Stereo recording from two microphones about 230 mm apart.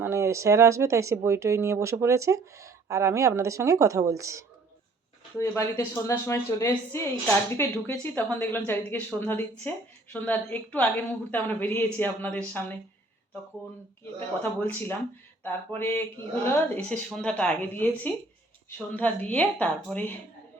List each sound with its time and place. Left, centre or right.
0.0 s speech: centre
5.4 s speech: centre
14.6 s speech: centre